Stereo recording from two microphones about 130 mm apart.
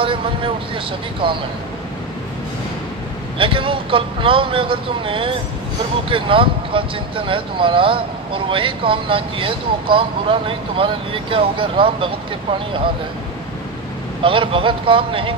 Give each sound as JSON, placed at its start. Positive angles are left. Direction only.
{"t": 0.0, "sound": "speech", "side_deg": -40}
{"t": 3.3, "sound": "speech", "side_deg": -40}
{"t": 14.2, "sound": "speech", "side_deg": -40}